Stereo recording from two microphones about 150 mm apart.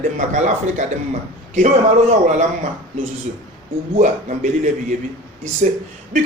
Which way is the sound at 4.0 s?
55° right (ahead or behind).